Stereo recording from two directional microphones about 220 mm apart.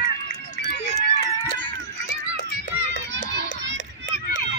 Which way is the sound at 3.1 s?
55° right (ahead or behind).